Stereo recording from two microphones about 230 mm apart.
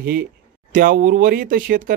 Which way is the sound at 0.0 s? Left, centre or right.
Right.